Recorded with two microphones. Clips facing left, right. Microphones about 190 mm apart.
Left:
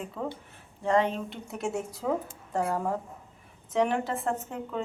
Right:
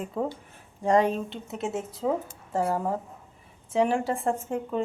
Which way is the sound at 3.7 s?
10° right (ahead or behind).